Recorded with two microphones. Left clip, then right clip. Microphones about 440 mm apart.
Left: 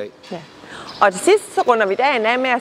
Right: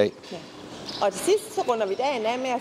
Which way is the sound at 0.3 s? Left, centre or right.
Left.